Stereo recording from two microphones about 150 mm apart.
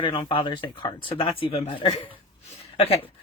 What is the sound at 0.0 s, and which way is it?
Speech, 35° left (ahead or behind).